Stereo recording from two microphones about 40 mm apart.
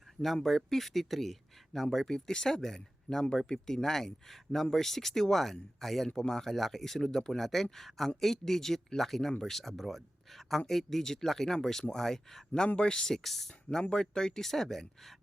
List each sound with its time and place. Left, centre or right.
0.4 s speech: centre
12.6 s speech: left
13.2 s speech: centre
13.9 s speech: centre
14.4 s speech: centre